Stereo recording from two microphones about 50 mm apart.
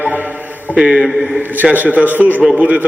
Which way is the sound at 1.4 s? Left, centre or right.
Right.